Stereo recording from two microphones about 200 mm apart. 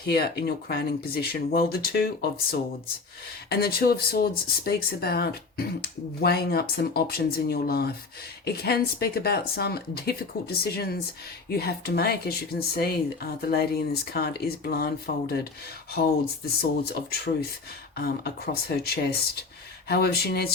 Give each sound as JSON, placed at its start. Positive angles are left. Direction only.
{"t": 0.0, "sound": "speech", "side_deg": 50}
{"t": 3.5, "sound": "speech", "side_deg": 50}
{"t": 16.6, "sound": "speech", "side_deg": 55}